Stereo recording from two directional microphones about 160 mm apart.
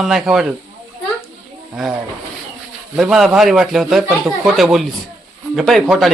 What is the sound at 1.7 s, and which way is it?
A man's voice, 5° right (ahead or behind).